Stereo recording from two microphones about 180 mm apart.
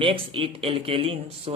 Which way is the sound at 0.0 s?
30° right (ahead or behind).